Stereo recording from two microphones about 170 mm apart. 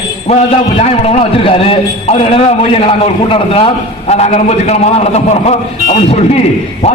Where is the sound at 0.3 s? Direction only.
35° left (ahead or behind).